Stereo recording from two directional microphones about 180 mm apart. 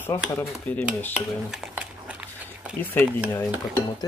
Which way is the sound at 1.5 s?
5° right (ahead or behind).